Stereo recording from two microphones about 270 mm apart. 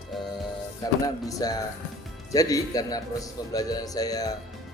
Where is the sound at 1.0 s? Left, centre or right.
Centre.